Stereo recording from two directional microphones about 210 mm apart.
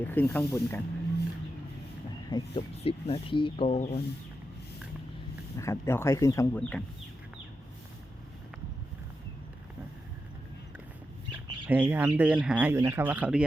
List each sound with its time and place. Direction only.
0.0 s speech: 10° left (ahead or behind)
2.3 s speech: 30° left (ahead or behind)
5.5 s speech: 15° left (ahead or behind)
11.7 s speech: 10° right (ahead or behind)